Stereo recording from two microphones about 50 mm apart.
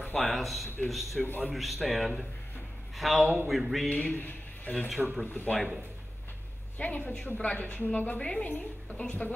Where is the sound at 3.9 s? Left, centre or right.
Left.